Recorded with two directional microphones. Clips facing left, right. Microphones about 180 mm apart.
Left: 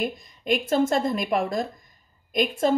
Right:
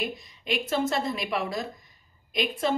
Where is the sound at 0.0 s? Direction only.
50° left (ahead or behind).